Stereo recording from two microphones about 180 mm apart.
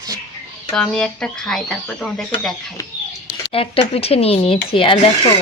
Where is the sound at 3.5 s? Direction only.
30° left (ahead or behind).